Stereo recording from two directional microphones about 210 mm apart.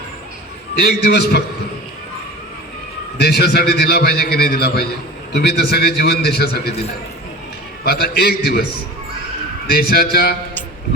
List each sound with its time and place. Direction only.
0.8 s a man's voice: 50° left (ahead or behind)
3.2 s a man's voice: 50° left (ahead or behind)
7.9 s a man's voice: 50° left (ahead or behind)
9.7 s a man's voice: 45° left (ahead or behind)